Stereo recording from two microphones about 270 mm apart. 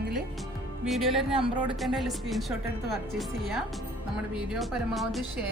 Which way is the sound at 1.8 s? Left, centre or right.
Centre.